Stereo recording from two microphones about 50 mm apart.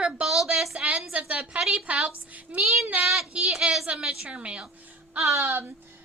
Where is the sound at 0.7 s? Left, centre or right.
Right.